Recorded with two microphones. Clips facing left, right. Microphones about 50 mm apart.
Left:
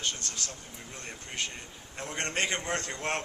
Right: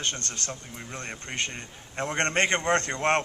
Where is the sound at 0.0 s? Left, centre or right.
Right.